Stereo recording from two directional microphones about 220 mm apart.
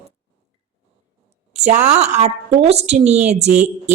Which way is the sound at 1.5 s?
30° right (ahead or behind).